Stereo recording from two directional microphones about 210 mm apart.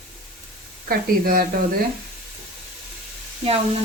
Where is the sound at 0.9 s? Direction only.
45° right (ahead or behind).